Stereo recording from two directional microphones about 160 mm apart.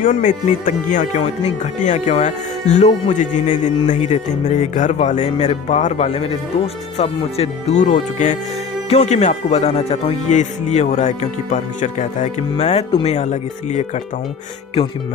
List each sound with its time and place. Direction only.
0.0 s speech: 55° left (ahead or behind)